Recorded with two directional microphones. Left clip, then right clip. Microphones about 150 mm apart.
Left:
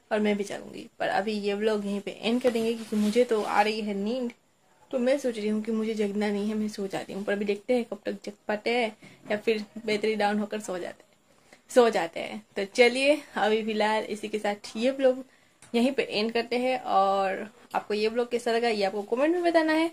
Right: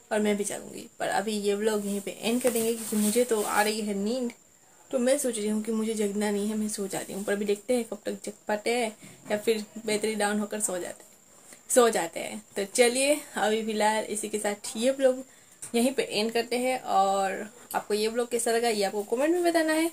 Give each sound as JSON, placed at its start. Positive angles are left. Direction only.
{"t": 0.1, "sound": "speech", "side_deg": 15}